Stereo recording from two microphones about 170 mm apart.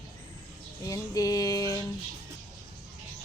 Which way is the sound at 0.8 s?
20° left (ahead or behind).